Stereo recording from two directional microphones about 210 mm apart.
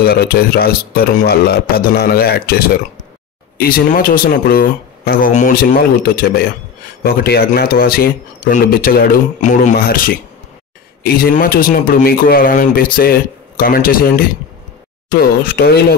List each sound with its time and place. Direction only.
0.0 s speech: 50° left (ahead or behind)
11.2 s speech: 45° left (ahead or behind)